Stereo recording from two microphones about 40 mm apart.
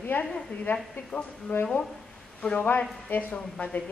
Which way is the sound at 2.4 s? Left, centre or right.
Left.